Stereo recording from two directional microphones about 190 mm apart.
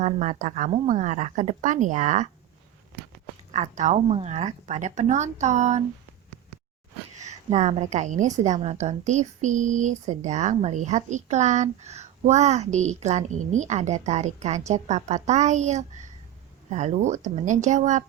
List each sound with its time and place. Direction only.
0.0 s a woman's voice: 40° right (ahead or behind)
3.5 s a woman's voice: 40° right (ahead or behind)
7.2 s a woman's voice: 35° right (ahead or behind)